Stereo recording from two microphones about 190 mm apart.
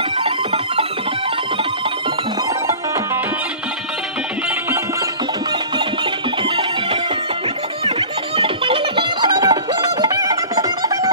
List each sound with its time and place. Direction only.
0.2 s music: 30° right (ahead or behind)
6.4 s music: 30° right (ahead or behind)
8.4 s music: 25° right (ahead or behind)